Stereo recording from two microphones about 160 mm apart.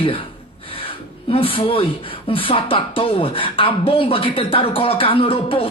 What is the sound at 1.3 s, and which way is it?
Speech, 35° left (ahead or behind).